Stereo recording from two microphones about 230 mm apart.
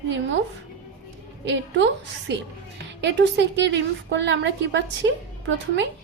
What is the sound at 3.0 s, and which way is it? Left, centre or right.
A woman's voice, right.